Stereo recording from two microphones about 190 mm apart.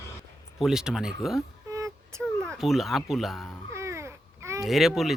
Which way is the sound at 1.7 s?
15° right (ahead or behind).